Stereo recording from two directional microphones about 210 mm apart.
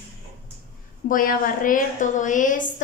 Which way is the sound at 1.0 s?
40° left (ahead or behind).